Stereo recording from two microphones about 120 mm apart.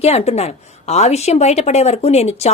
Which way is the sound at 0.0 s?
60° left (ahead or behind).